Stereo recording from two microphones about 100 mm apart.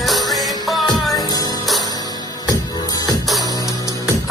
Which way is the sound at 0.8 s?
40° left (ahead or behind).